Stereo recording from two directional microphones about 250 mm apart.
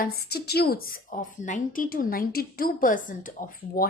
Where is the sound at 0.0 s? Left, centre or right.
Left.